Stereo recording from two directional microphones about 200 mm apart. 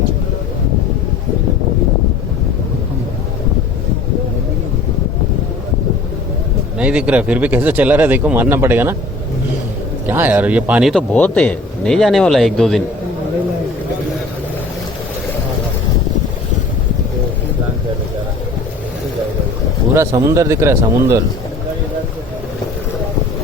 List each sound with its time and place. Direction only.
6.7 s speech: 5° right (ahead or behind)
10.1 s a man's voice: 10° right (ahead or behind)
20.0 s speech: 15° right (ahead or behind)